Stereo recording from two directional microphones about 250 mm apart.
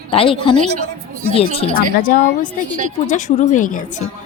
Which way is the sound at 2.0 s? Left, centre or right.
Left.